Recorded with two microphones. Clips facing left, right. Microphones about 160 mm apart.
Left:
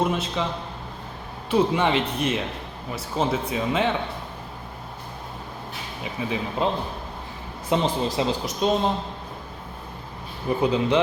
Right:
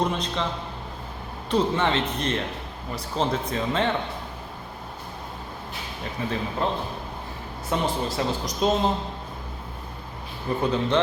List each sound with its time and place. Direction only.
0.0 s speech: 5° left (ahead or behind)
1.5 s speech: 10° left (ahead or behind)
6.2 s speech: 10° left (ahead or behind)
8.4 s speech: centre (ahead or behind)
10.6 s speech: 10° left (ahead or behind)